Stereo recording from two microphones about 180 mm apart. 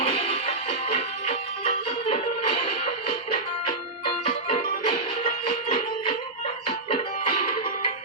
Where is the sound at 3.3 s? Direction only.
30° left (ahead or behind).